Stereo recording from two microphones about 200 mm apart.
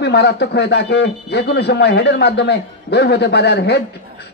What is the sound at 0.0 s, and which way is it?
A man's voice, 55° left (ahead or behind).